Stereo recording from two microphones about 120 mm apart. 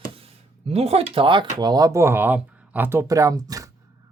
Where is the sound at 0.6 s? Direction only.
60° right (ahead or behind); by 3.7 s 30° right (ahead or behind).